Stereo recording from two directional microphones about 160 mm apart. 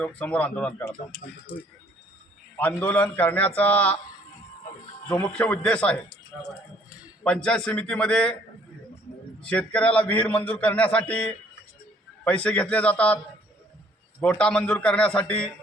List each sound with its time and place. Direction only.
0.0 s a man's voice: 10° left (ahead or behind)
2.6 s a man's voice: 10° left (ahead or behind)
5.0 s a man's voice: 10° left (ahead or behind)
9.5 s a man's voice: 5° left (ahead or behind)
14.2 s a man's voice: 5° left (ahead or behind)